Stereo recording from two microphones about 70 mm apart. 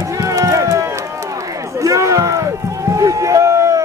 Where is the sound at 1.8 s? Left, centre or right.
Right.